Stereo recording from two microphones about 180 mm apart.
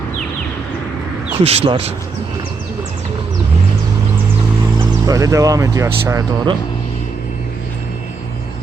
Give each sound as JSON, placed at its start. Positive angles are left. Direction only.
{"t": 1.5, "sound": "speech", "side_deg": -30}
{"t": 4.8, "sound": "speech", "side_deg": -20}